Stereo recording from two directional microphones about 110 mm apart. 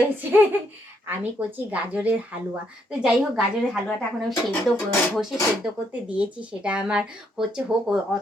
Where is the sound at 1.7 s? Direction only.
15° right (ahead or behind).